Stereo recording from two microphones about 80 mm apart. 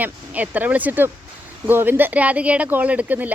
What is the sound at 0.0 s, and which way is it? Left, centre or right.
Speech, right.